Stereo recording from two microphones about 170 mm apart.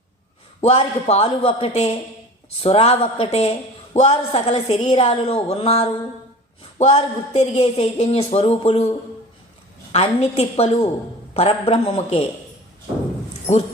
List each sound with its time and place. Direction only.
0.6 s speech: 35° left (ahead or behind)
9.9 s speech: 40° left (ahead or behind)